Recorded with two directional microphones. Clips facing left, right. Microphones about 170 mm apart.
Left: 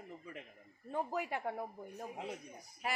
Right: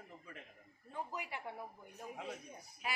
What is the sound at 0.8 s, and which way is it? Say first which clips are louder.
Speech: left 7 dB; 50° left (ahead or behind).